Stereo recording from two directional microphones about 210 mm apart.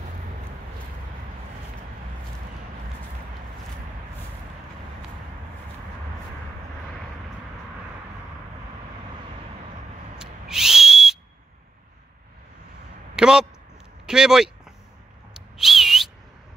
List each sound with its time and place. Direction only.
10.1 s whistle: 5° right (ahead or behind)
13.1 s a sound: 5° right (ahead or behind)
14.0 s speech: 5° right (ahead or behind)
15.5 s whistle: centre (ahead or behind)